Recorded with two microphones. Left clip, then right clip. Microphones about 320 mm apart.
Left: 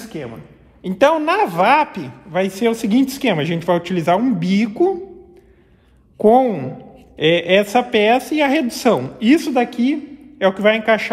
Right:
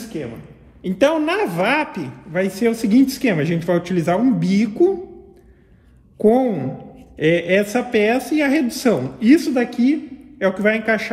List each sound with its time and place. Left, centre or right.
0.0 s a sound: centre
0.8 s a woman's voice: left
6.2 s a woman's voice: centre